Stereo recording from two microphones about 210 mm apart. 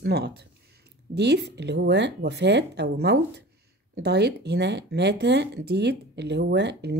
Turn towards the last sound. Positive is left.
turn(degrees=-55)  # may be behind; listen again after turning